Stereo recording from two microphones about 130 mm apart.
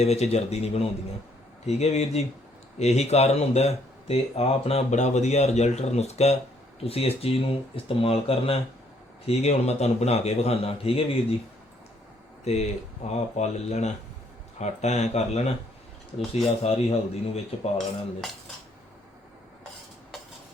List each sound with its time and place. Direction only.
0.0 s speech: 55° left (ahead or behind)
12.5 s speech: 60° left (ahead or behind)